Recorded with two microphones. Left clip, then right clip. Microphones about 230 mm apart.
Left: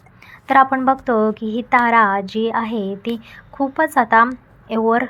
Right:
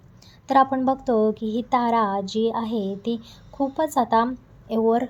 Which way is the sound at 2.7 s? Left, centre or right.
Left.